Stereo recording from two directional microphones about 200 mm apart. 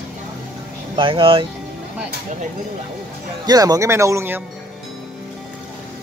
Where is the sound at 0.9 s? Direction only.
25° right (ahead or behind).